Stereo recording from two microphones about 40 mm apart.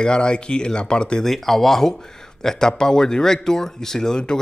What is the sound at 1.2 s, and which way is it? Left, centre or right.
Speech, centre.